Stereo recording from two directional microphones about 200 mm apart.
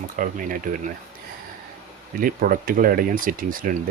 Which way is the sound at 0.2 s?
40° right (ahead or behind).